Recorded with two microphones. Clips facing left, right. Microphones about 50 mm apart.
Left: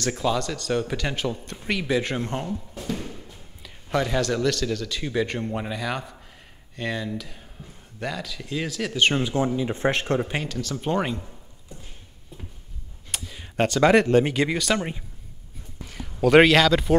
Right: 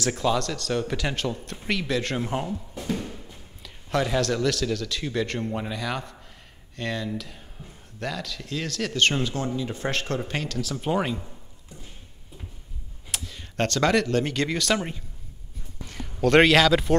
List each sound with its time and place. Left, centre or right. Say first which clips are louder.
0.0 s speech: even; centre
2.2 s speech: right 1 dB; centre
2.7 s a sound: right 1 dB; centre
3.6 s speech: left 1 dB; centre; by 10.3 s left
10.3 s speech: left 1 dB; centre
10.6 s speech: even; centre
13.1 s tick-tock: even; centre
13.9 s speech: left 5 dB; left; by 14.9 s centre
15.9 s a man's voice: left 3 dB; centre